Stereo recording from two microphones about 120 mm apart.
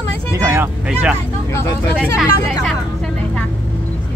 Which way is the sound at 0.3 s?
25° right (ahead or behind).